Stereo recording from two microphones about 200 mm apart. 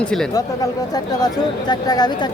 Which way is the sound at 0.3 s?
20° left (ahead or behind).